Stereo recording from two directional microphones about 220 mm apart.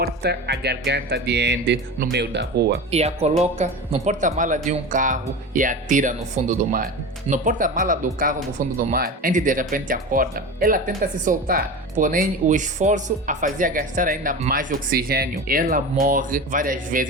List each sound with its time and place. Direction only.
0.0 s speech: 45° right (ahead or behind)
2.9 s speech: 30° right (ahead or behind)